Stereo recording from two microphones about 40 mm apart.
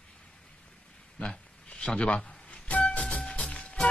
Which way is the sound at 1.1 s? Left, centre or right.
Left.